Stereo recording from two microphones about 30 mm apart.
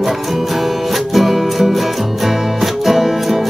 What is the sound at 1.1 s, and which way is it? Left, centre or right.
Music, centre.